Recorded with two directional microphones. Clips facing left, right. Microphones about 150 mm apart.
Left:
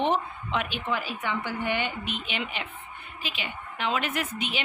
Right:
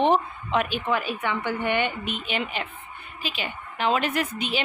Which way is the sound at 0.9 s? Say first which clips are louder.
Right 2 dB; 60° right (ahead or behind).